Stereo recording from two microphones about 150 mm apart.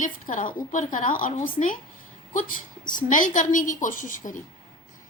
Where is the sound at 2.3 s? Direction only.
60° left (ahead or behind).